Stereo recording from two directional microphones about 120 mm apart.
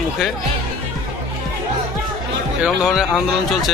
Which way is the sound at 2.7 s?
Centre (ahead or behind).